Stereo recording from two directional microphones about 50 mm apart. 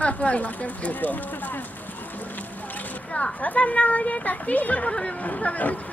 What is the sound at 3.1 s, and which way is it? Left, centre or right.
Speech, left.